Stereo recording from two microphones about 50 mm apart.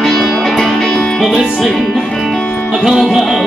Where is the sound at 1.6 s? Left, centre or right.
Centre.